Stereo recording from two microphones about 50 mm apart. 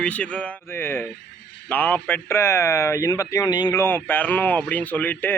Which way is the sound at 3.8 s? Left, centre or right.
Left.